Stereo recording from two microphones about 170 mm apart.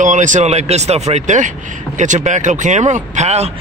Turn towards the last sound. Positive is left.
turn(degrees=-40)  # may be behind; listen again after turning